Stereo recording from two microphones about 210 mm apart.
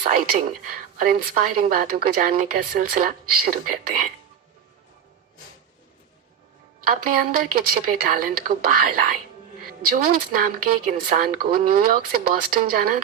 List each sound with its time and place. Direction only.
0.6 s a woman's voice: 40° right (ahead or behind)
6.8 s a woman's voice: 45° right (ahead or behind)